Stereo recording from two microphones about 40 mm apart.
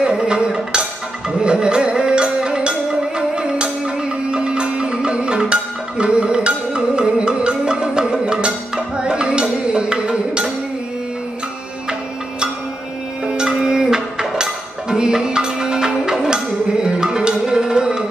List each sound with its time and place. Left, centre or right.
0.2 s music: right
13.3 s music: centre
16.8 s tabla: centre